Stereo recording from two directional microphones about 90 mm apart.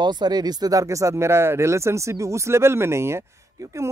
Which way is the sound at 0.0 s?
55° right (ahead or behind).